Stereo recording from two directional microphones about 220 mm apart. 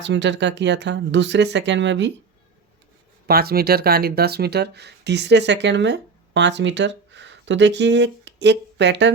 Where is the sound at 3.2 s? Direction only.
45° right (ahead or behind).